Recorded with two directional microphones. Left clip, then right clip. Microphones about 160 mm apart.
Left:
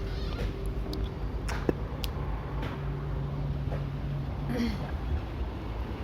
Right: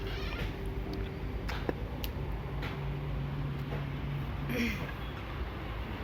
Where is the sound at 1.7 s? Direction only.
70° left (ahead or behind).